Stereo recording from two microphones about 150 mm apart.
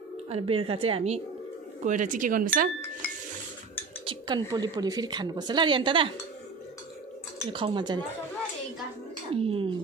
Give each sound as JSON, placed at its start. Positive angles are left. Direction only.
{"t": 0.3, "sound": "a woman's voice", "side_deg": -40}
{"t": 1.8, "sound": "speech", "side_deg": -55}
{"t": 4.0, "sound": "a sound", "side_deg": -35}
{"t": 4.5, "sound": "speech", "side_deg": -25}
{"t": 7.5, "sound": "a woman's voice", "side_deg": -30}
{"t": 9.3, "sound": "a woman's voice", "side_deg": -40}